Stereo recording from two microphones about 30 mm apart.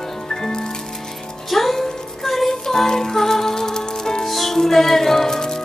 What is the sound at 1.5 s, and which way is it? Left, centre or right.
Music, centre.